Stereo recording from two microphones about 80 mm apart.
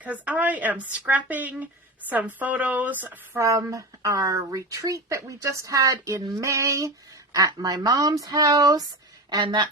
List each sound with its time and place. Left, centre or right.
0.0 s a woman's voice: centre
3.3 s speech: right
7.3 s speech: right
9.3 s speech: right